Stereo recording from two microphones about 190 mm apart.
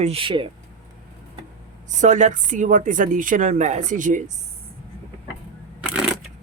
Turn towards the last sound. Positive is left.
turn(degrees=-5)  # may be behind; listen again after turning